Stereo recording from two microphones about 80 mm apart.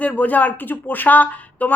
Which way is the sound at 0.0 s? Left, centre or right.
Centre.